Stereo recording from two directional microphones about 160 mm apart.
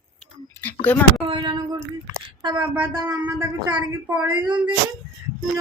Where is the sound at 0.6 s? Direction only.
10° left (ahead or behind).